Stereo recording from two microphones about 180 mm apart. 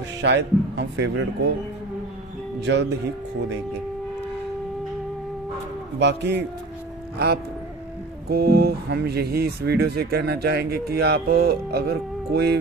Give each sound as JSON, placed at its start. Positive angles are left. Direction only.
{"t": 0.2, "sound": "speech", "side_deg": -75}
{"t": 2.6, "sound": "speech", "side_deg": -75}
{"t": 5.9, "sound": "speech", "side_deg": -70}